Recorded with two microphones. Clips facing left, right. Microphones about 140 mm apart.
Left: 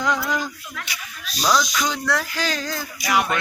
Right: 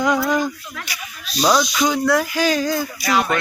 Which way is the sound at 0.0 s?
10° right (ahead or behind).